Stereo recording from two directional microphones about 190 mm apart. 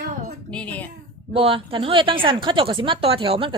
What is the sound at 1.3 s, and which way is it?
Speech, 30° right (ahead or behind).